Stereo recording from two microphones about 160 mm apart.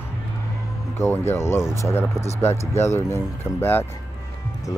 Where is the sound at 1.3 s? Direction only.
15° left (ahead or behind).